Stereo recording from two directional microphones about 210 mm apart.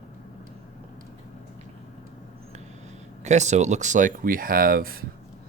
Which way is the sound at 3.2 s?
35° right (ahead or behind).